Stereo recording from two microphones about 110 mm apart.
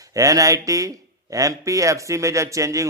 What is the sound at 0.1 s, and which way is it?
A man's voice, 30° right (ahead or behind).